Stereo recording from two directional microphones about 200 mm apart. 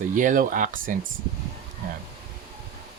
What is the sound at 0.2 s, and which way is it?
Speech, 40° right (ahead or behind).